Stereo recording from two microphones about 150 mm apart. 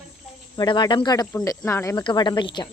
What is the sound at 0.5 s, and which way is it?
Speech, 30° left (ahead or behind).